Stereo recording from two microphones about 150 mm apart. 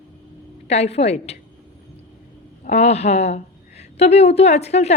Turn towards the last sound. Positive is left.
turn(degrees=45)  # may be behind; listen again after turning